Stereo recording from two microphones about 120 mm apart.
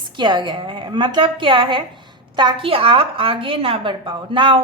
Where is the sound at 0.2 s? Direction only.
40° right (ahead or behind).